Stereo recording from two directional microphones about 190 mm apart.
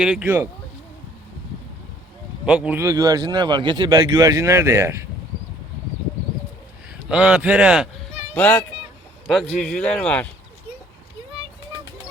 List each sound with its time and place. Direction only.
0.0 s speech: 5° right (ahead or behind)
2.5 s speech: 5° right (ahead or behind)
7.1 s speech: 5° right (ahead or behind)
8.3 s speech: 10° left (ahead or behind)